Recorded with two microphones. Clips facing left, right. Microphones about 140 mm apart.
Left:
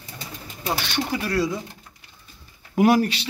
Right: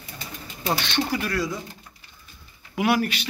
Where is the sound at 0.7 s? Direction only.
10° left (ahead or behind).